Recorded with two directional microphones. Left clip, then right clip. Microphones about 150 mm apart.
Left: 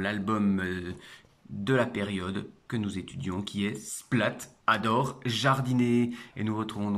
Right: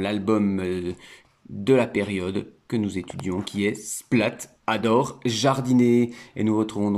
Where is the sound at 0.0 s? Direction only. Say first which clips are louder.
Right 6 dB; 20° right (ahead or behind).